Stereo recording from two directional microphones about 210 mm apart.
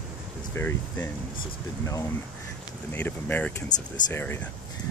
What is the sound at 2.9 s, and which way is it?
Speech, 10° left (ahead or behind).